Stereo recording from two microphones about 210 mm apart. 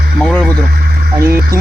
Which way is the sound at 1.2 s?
45° right (ahead or behind).